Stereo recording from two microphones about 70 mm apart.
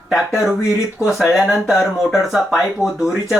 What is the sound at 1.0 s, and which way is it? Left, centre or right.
Speech, centre.